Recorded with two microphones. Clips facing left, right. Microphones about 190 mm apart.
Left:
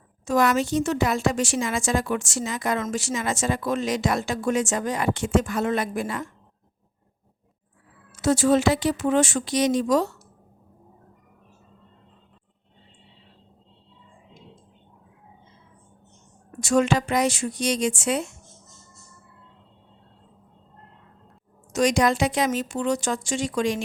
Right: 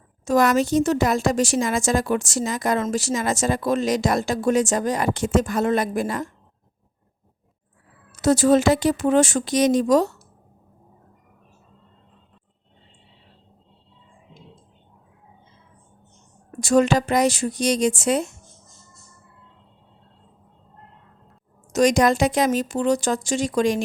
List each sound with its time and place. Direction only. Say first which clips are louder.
0.3 s a woman's voice: right 3 dB; 40° right (ahead or behind)
8.1 s a woman's voice: right 3 dB; 40° right (ahead or behind)
16.6 s a woman's voice: right 3 dB; 35° right (ahead or behind)
21.7 s a woman's voice: right 3 dB; 40° right (ahead or behind)